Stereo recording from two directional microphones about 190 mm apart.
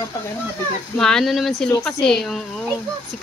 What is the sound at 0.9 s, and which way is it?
A woman's voice, 5° left (ahead or behind).